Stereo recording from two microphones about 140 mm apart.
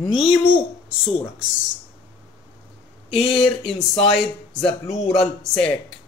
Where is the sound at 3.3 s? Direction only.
5° left (ahead or behind).